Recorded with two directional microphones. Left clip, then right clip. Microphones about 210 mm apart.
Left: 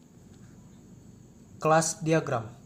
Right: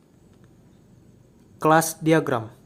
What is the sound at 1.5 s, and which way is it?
Speech, 45° right (ahead or behind).